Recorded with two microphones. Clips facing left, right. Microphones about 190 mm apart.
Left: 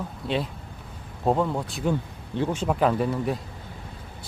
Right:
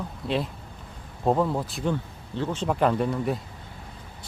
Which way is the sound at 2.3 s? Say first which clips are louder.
Left 1 dB; 10° left (ahead or behind).